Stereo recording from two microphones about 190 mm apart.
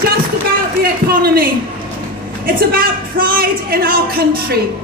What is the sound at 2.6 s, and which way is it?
A man's voice, 50° right (ahead or behind).